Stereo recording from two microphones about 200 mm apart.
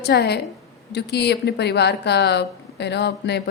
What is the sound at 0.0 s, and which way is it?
A woman's voice, 55° left (ahead or behind).